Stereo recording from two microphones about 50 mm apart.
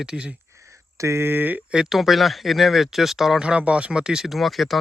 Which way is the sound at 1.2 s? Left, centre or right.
Right.